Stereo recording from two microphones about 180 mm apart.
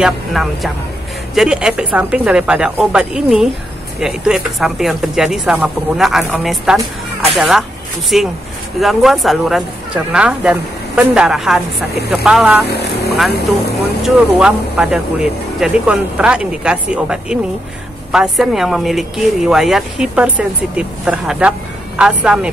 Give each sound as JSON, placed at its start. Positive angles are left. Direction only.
{"t": 0.0, "sound": "speech", "side_deg": 0}
{"t": 12.6, "sound": "speech", "side_deg": 65}
{"t": 14.0, "sound": "speech", "side_deg": -5}